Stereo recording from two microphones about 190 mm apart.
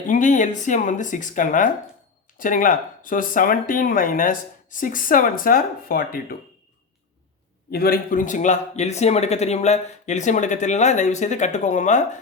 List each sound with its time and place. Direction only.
0.1 s speech: 40° left (ahead or behind)
7.7 s speech: 50° left (ahead or behind)